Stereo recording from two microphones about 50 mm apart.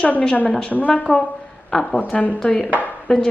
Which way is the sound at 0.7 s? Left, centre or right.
Left.